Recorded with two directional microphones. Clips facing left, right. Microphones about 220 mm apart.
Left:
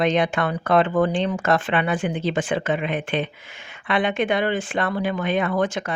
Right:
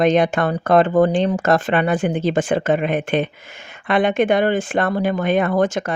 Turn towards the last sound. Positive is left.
turn(degrees=-45)  # may be behind; listen again after turning